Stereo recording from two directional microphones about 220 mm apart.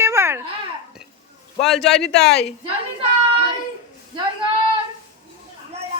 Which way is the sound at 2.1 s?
50° left (ahead or behind).